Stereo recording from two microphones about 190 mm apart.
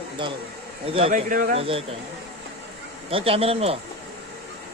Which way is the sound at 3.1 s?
30° right (ahead or behind).